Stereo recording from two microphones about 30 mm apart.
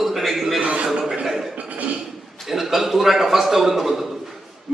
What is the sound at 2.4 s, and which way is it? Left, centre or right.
A man's voice, centre.